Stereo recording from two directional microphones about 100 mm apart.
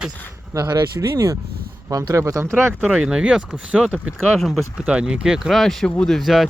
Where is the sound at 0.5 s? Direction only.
40° right (ahead or behind); by 2.7 s 25° right (ahead or behind).